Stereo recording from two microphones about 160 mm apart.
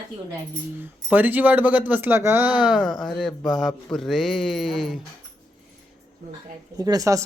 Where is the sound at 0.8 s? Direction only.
10° right (ahead or behind).